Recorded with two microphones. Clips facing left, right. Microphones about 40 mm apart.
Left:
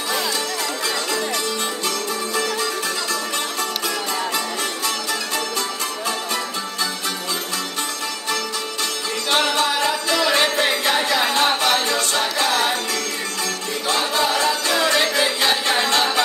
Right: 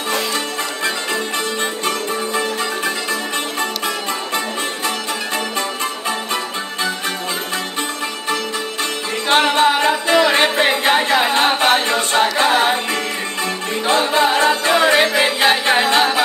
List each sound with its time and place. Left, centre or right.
1.9 s music: right
9.3 s music: right
13.8 s music: right